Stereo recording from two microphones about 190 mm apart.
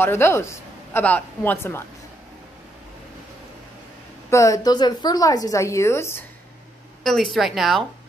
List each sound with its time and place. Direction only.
0.0 s a woman's voice: 15° left (ahead or behind)
4.3 s a woman's voice: 15° left (ahead or behind)
7.0 s a woman's voice: centre (ahead or behind)